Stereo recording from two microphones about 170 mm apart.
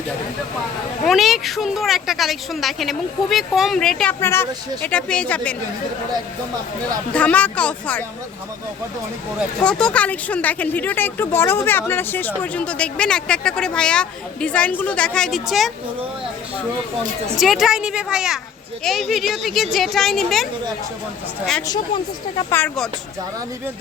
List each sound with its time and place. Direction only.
1.0 s speech: centre (ahead or behind)
4.2 s speech: 15° left (ahead or behind)
7.1 s speech: 10° left (ahead or behind)
9.6 s speech: 5° left (ahead or behind)
17.3 s speech: centre (ahead or behind)
22.5 s speech: 5° left (ahead or behind)